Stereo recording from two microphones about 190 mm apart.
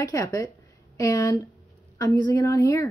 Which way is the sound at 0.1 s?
20° left (ahead or behind).